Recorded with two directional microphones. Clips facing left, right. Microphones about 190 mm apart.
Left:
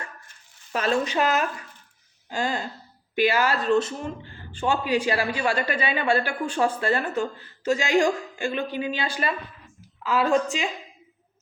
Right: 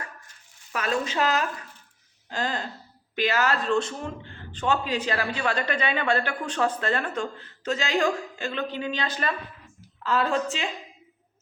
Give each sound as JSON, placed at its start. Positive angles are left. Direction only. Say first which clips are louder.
{"t": 0.7, "sound": "speech", "louder": "left 4 dB", "side_deg": 30}
{"t": 1.0, "sound": "a woman's voice", "louder": "left 2 dB", "side_deg": 15}